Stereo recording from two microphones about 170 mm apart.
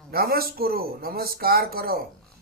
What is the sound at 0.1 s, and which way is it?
A man's voice, 65° right (ahead or behind).